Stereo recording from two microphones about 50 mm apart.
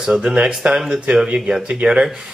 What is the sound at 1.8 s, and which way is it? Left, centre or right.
Speech, centre.